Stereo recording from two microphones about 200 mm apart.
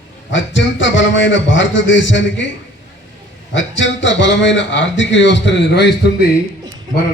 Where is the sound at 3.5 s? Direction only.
65° left (ahead or behind).